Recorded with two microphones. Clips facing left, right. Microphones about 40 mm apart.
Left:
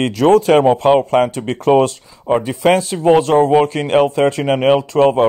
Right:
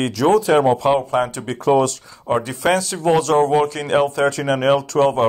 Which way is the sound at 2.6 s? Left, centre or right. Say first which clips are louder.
Left 6 dB; left.